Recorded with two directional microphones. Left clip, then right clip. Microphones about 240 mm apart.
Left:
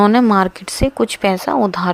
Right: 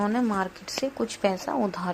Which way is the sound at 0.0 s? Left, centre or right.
Left.